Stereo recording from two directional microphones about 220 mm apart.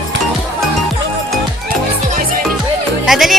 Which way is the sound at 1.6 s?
40° right (ahead or behind).